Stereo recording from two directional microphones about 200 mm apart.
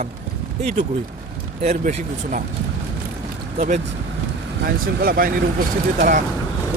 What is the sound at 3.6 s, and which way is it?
Speech, 35° right (ahead or behind).